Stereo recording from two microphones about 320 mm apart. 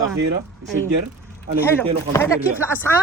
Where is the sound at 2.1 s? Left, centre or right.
Centre.